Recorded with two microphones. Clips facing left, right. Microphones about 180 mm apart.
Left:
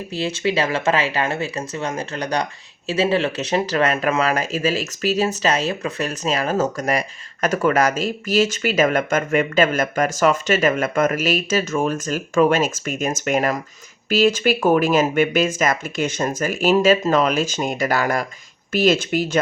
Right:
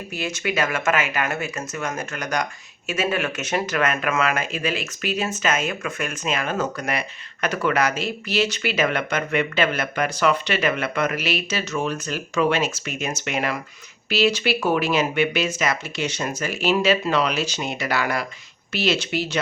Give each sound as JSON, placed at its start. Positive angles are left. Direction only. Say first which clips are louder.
{"t": 0.1, "sound": "speech", "louder": "left 5 dB", "side_deg": 30}